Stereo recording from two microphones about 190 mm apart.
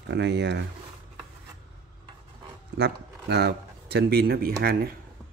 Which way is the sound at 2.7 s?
60° right (ahead or behind).